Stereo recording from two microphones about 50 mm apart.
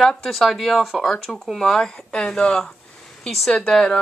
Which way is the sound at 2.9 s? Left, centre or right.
Centre.